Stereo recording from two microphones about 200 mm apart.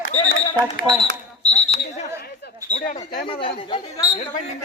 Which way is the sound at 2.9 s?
55° left (ahead or behind).